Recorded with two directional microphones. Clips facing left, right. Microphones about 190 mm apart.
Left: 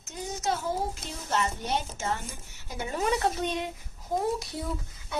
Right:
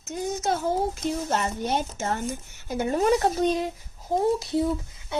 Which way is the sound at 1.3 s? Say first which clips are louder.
Left 2 dB; 50° right (ahead or behind).